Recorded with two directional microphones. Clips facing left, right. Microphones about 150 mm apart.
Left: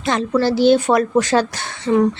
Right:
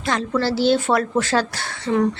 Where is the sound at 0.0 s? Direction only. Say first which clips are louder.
Left 4 dB; 20° left (ahead or behind).